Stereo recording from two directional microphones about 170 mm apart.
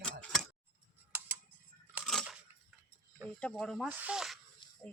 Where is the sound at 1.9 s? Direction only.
Centre (ahead or behind).